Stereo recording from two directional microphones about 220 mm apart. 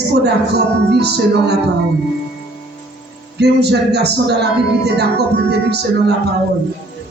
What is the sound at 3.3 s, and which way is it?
Speech, 50° right (ahead or behind).